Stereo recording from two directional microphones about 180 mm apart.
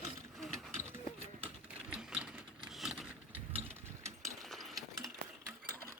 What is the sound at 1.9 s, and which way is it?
Sewing machine, 5° right (ahead or behind).